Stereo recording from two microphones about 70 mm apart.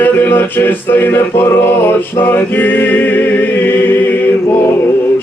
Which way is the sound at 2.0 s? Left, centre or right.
Left.